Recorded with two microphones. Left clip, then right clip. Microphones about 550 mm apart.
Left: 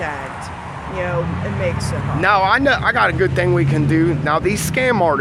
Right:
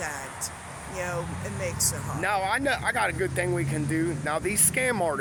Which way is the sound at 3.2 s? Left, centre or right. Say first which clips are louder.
Left 11 dB; right.